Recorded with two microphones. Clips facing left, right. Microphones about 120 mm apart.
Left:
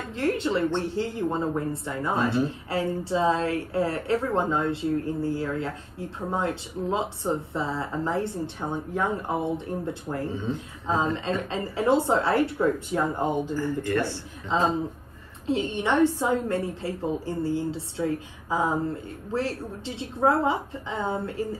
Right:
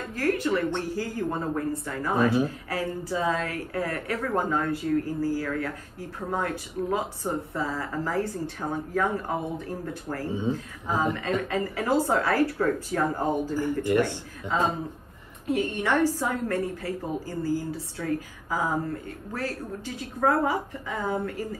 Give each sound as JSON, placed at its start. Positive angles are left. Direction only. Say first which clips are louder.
{"t": 0.1, "sound": "a woman's voice", "louder": "even", "side_deg": 25}
{"t": 10.5, "sound": "a woman's voice", "louder": "left 2 dB", "side_deg": 25}
{"t": 13.6, "sound": "speech", "louder": "right 2 dB", "side_deg": -15}
{"t": 14.5, "sound": "a woman's voice", "louder": "left 2 dB", "side_deg": 25}